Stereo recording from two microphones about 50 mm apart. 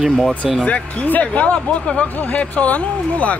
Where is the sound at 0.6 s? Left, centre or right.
Left.